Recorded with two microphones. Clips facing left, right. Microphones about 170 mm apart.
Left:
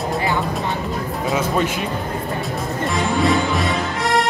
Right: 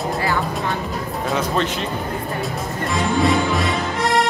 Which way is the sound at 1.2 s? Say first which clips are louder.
Left 1 dB; 10° left (ahead or behind).